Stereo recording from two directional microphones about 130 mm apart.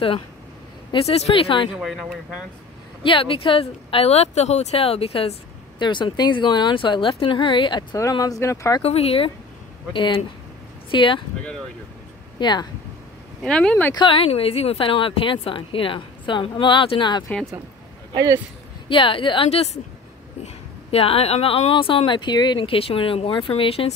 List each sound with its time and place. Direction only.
0.9 s speech: 50° left (ahead or behind)
1.8 s speech: centre (ahead or behind)
3.0 s speech: 40° left (ahead or behind)
5.8 s speech: 35° left (ahead or behind)
8.0 s speech: 25° left (ahead or behind)
8.8 s speech: 50° left (ahead or behind)
9.9 s speech: 40° left (ahead or behind)
12.4 s speech: 35° left (ahead or behind)
13.4 s speech: 5° left (ahead or behind)
13.9 s speech: 45° left (ahead or behind)
18.9 s speech: 40° left (ahead or behind)